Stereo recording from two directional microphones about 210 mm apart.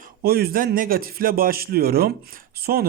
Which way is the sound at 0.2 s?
45° right (ahead or behind).